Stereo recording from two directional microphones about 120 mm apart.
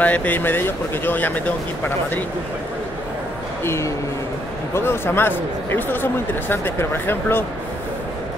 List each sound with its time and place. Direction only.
0.0 s speech: 10° left (ahead or behind)
3.6 s speech: 25° left (ahead or behind)